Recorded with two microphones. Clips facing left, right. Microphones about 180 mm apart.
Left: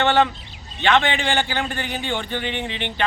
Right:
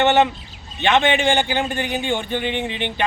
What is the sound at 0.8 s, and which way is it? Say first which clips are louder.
A man's voice: right 2 dB; 20° right (ahead or behind).